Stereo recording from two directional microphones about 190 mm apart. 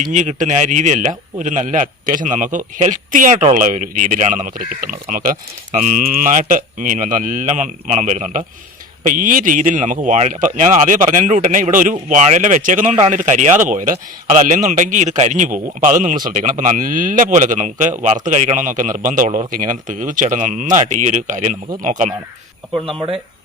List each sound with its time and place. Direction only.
0.0 s speech: 40° right (ahead or behind)
22.9 s speech: 30° right (ahead or behind)